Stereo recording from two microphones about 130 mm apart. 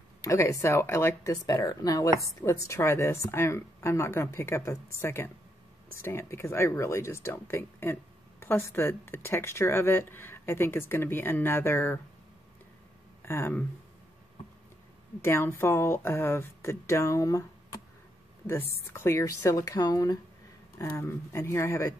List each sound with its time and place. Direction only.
0.2 s a woman's voice: 25° left (ahead or behind)
13.2 s speech: 20° left (ahead or behind)
15.2 s a woman's voice: 20° left (ahead or behind)
18.9 s a woman's voice: 20° left (ahead or behind)
20.7 s a woman's voice: 20° left (ahead or behind)